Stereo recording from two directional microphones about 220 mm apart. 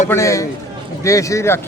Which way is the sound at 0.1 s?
15° left (ahead or behind).